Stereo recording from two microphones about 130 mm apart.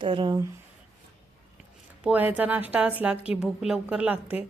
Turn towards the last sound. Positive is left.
turn(degrees=-10)  # may be behind; listen again after turning